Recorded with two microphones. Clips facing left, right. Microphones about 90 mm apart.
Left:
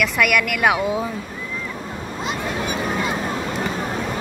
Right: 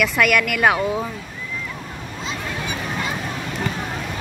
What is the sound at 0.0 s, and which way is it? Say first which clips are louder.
Speech: right 1 dB; centre (ahead or behind).